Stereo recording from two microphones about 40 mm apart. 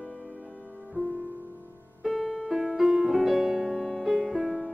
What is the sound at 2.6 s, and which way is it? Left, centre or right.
Music, centre.